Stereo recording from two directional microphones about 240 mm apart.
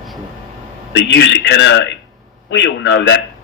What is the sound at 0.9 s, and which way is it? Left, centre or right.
A man's voice, left.